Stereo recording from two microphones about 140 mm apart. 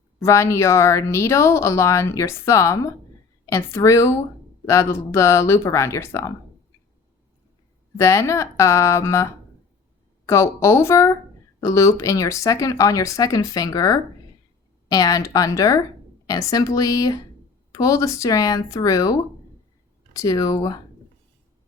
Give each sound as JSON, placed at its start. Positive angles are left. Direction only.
{"t": 0.2, "sound": "speech", "side_deg": 20}
{"t": 7.9, "sound": "speech", "side_deg": 20}